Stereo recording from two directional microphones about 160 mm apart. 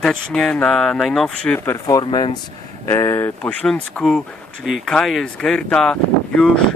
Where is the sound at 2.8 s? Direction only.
15° left (ahead or behind).